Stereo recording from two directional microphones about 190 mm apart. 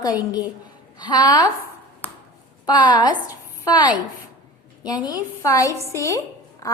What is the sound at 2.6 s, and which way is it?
A woman's voice, 25° left (ahead or behind).